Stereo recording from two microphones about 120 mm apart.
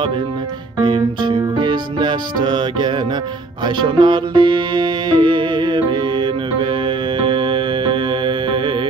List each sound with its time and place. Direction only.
0.8 s music: 45° right (ahead or behind)